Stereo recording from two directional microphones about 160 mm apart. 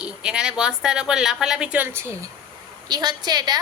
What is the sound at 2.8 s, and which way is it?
Speech, 25° right (ahead or behind).